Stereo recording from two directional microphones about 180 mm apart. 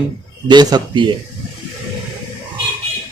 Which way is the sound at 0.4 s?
25° right (ahead or behind).